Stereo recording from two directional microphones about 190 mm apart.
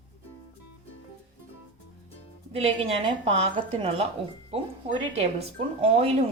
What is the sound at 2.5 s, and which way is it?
A woman's voice, 30° right (ahead or behind).